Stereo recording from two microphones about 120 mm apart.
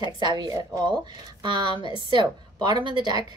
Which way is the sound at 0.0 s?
35° right (ahead or behind).